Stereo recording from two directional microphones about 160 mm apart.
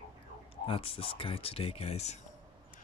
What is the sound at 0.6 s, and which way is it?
Speech, 35° left (ahead or behind).